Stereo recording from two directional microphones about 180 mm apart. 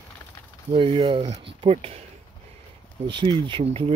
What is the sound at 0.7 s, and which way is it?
Speech, 30° right (ahead or behind).